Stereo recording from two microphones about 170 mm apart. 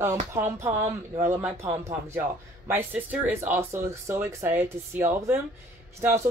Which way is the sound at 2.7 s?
10° right (ahead or behind).